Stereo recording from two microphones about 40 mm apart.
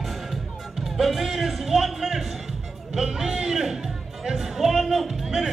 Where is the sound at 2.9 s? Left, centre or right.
Centre.